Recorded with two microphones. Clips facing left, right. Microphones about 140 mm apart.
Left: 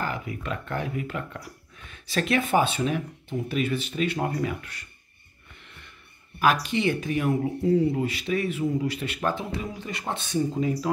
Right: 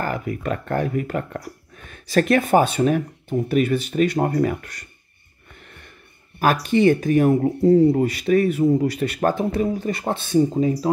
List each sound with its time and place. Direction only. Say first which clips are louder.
0.0 s speech: right 6 dB; 50° right (ahead or behind)
6.4 s speech: right 6 dB; 45° right (ahead or behind)